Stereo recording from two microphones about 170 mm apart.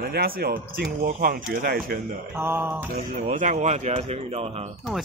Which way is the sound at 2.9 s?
55° right (ahead or behind).